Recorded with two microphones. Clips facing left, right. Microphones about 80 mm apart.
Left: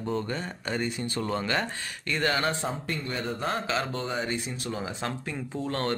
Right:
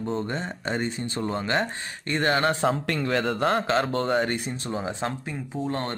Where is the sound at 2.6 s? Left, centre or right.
Right.